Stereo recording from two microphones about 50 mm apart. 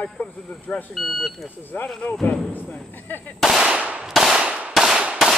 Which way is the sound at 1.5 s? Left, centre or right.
Left.